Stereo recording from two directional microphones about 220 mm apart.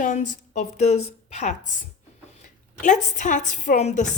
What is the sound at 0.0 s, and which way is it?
A woman's voice, 35° left (ahead or behind).